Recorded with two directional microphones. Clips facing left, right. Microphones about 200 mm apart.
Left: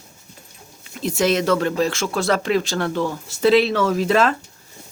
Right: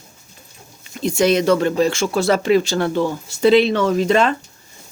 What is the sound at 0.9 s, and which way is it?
Speech, centre (ahead or behind).